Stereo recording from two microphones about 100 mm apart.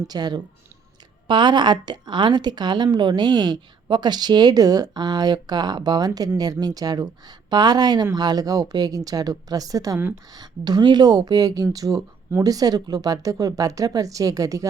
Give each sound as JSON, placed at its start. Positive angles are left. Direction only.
{"t": 0.1, "sound": "a woman's voice", "side_deg": -45}